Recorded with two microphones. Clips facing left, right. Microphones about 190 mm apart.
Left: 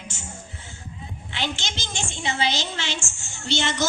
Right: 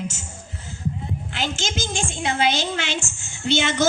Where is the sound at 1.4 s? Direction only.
50° right (ahead or behind).